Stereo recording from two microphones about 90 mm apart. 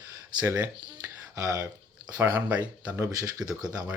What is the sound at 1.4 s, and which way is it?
Speech, 40° right (ahead or behind).